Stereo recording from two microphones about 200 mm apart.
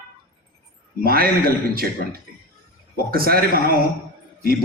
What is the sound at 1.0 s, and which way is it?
A man's voice, 50° right (ahead or behind).